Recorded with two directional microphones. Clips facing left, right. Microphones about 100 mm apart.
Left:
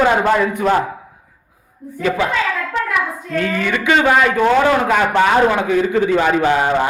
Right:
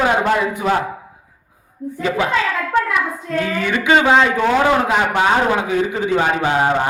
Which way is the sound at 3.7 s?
25° right (ahead or behind).